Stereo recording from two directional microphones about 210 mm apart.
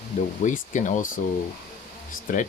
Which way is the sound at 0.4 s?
35° left (ahead or behind).